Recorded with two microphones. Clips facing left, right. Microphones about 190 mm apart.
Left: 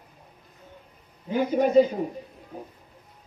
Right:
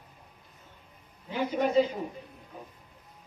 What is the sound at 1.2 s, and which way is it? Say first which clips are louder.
Speech: left 6 dB; 45° left (ahead or behind).